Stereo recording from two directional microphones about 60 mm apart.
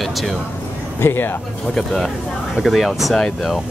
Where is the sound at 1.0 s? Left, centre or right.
Left.